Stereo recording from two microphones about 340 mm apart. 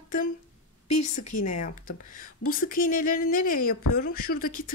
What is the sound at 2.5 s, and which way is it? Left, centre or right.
Speech, left.